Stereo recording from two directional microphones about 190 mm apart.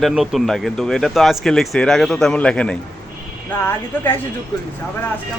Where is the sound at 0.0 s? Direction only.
Centre (ahead or behind).